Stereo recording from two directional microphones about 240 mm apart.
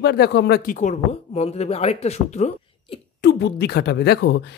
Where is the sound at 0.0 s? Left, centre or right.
Left.